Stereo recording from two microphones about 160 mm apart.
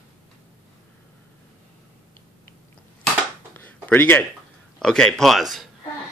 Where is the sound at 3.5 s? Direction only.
10° left (ahead or behind).